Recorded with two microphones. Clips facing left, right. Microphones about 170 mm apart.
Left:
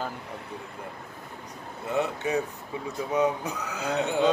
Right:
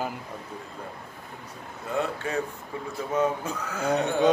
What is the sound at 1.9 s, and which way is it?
Speech, 20° left (ahead or behind).